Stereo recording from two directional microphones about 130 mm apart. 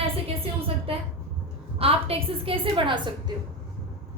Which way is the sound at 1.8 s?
45° right (ahead or behind).